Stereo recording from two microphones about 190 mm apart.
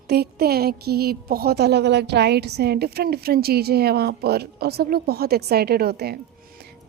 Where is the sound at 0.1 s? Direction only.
55° right (ahead or behind).